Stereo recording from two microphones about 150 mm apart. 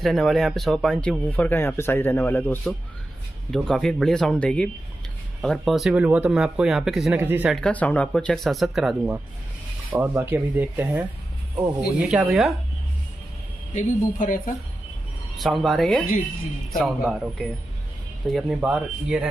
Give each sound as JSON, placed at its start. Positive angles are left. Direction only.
{"t": 0.0, "sound": "speech", "side_deg": 0}
{"t": 3.5, "sound": "speech", "side_deg": 0}
{"t": 7.2, "sound": "speech", "side_deg": -15}
{"t": 7.4, "sound": "speech", "side_deg": 5}
{"t": 9.9, "sound": "speech", "side_deg": -15}
{"t": 13.7, "sound": "speech", "side_deg": 60}
{"t": 15.3, "sound": "speech", "side_deg": 0}
{"t": 18.6, "sound": "speech", "side_deg": -5}